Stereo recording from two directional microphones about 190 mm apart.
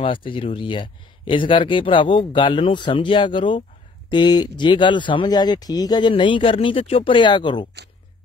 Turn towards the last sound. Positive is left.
turn(degrees=25)  # may be behind; listen again after turning